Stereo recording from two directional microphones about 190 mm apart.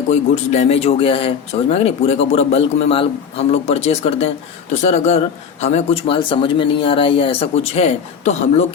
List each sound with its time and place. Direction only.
0.1 s a man's voice: 35° left (ahead or behind)